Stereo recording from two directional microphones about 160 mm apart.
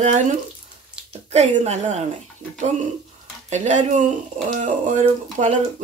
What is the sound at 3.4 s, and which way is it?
Speech, 45° right (ahead or behind).